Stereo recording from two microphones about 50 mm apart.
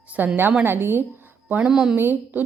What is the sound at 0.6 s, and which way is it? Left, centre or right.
Speech, right.